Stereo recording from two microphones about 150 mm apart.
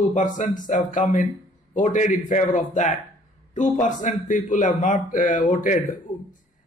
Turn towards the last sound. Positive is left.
turn(degrees=0)  # may be behind; listen again after turning